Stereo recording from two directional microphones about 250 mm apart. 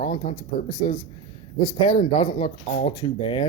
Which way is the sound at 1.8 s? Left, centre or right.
Left.